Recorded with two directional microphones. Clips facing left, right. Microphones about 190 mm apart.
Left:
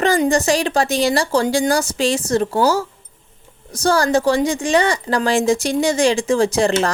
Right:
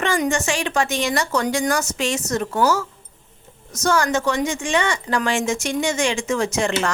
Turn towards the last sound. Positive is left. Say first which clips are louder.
# left 5 dB
turn(degrees=35)  # may be behind; listen again after turning